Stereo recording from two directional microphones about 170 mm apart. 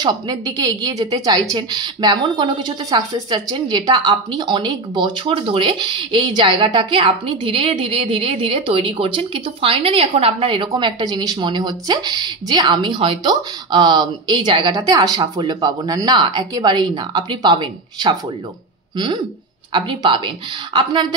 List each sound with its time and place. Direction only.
0.0 s a woman's voice: 20° right (ahead or behind)